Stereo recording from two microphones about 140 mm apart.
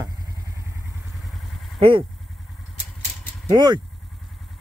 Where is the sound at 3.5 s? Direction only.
30° right (ahead or behind).